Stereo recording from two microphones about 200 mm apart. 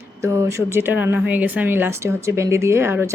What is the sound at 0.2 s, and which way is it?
Speech, 15° right (ahead or behind).